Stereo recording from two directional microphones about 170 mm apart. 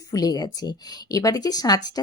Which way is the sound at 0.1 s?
20° left (ahead or behind).